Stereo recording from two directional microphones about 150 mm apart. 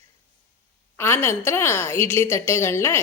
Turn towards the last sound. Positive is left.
turn(degrees=20)  # may be behind; listen again after turning